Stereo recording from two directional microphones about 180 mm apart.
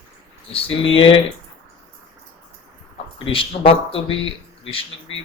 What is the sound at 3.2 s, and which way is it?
Speech, 30° left (ahead or behind).